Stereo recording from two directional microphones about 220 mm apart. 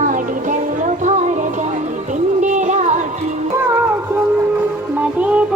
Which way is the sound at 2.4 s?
35° right (ahead or behind).